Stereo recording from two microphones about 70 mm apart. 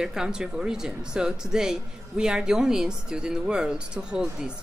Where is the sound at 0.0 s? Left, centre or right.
Centre.